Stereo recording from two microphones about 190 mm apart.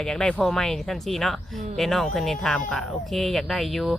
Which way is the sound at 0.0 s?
5° left (ahead or behind).